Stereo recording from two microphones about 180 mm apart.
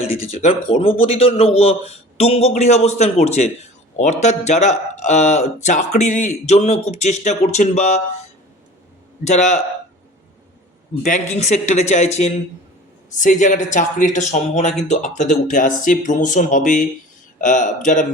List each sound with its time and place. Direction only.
0.1 s speech: 35° left (ahead or behind)
11.0 s a man's voice: 40° left (ahead or behind)